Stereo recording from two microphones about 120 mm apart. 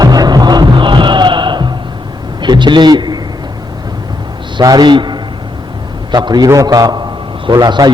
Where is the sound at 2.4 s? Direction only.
40° right (ahead or behind).